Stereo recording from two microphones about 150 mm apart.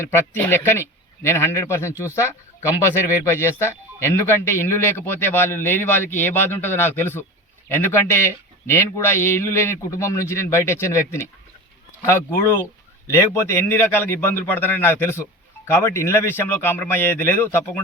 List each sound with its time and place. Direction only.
0.0 s speech: 15° left (ahead or behind)